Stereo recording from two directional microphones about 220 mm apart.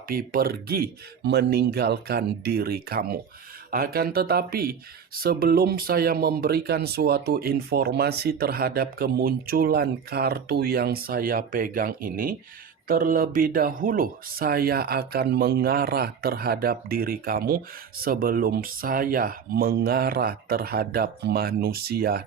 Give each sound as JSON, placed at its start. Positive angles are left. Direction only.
{"t": 0.1, "sound": "speech", "side_deg": -40}